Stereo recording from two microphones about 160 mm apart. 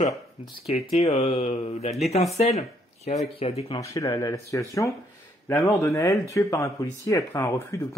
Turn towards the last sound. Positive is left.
turn(degrees=20)  # may be behind; listen again after turning